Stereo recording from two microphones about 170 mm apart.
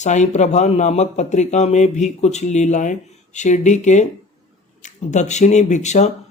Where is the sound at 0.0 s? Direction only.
45° left (ahead or behind).